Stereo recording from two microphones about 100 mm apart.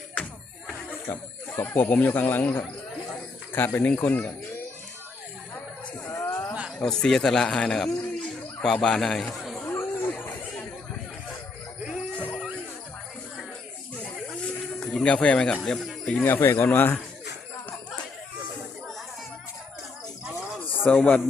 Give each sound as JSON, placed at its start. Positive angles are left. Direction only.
{"t": 1.0, "sound": "speech", "side_deg": 20}
{"t": 6.1, "sound": "a sound", "side_deg": 30}
{"t": 6.7, "sound": "speech", "side_deg": 5}
{"t": 9.6, "sound": "chatter", "side_deg": 20}
{"t": 12.1, "sound": "music", "side_deg": 15}
{"t": 14.8, "sound": "speech", "side_deg": 10}
{"t": 16.0, "sound": "speech", "side_deg": 15}
{"t": 20.6, "sound": "a sound", "side_deg": 15}